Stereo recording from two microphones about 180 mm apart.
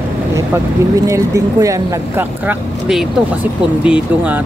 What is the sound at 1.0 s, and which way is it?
Speech, 20° right (ahead or behind).